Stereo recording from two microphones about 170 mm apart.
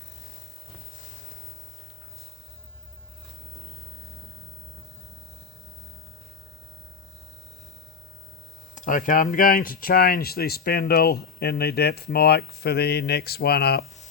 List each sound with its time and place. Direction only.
8.7 s speech: 50° left (ahead or behind); by 13.8 s 70° left (ahead or behind)